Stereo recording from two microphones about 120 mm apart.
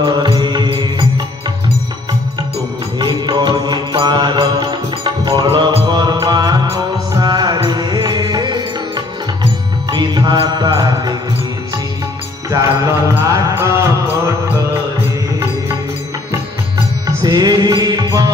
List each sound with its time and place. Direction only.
0.0 s mantra: 35° right (ahead or behind)
3.0 s mantra: 40° right (ahead or behind)
5.0 s music: 45° right (ahead or behind)
12.4 s music: 25° right (ahead or behind)
17.2 s music: 35° right (ahead or behind)